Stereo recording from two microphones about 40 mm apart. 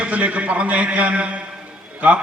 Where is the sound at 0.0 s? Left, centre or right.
Right.